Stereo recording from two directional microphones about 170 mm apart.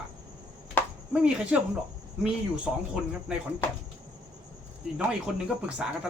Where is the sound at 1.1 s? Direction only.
5° right (ahead or behind).